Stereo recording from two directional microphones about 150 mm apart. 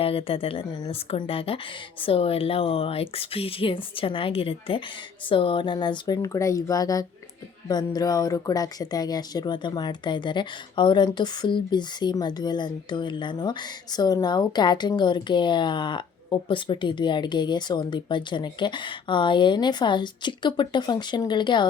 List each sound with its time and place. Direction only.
0.0 s speech: 40° left (ahead or behind)